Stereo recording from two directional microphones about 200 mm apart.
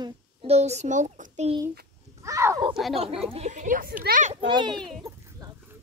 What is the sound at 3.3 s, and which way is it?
Speech, 35° right (ahead or behind).